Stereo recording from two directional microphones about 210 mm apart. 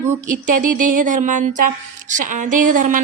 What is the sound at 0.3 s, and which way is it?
A woman's voice, 40° right (ahead or behind).